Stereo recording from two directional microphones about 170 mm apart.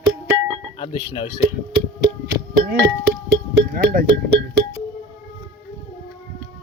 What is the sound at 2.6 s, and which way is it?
Speech, 65° right (ahead or behind).